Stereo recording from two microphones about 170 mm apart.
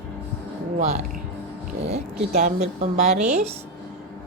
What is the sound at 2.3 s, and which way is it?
Speech, 60° right (ahead or behind).